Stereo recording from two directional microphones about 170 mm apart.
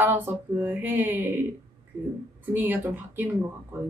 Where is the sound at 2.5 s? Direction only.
15° right (ahead or behind).